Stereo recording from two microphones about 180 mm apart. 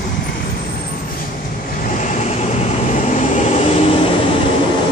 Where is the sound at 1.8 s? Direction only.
45° left (ahead or behind).